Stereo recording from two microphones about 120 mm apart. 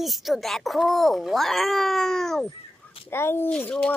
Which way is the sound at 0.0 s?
Centre (ahead or behind).